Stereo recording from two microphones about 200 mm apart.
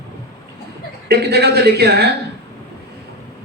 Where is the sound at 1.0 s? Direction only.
55° right (ahead or behind).